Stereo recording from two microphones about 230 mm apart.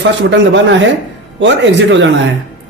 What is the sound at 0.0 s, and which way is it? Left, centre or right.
Speech, right.